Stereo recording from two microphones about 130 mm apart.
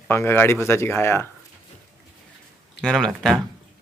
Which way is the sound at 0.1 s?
20° left (ahead or behind).